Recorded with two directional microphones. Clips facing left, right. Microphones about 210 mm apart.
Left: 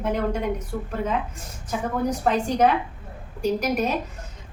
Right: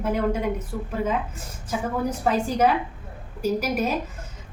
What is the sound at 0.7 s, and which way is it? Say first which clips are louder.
Speech: left 1 dB; 5° right (ahead or behind).